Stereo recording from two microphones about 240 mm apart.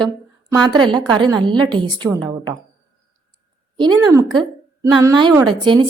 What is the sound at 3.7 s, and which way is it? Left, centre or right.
A woman's voice, centre.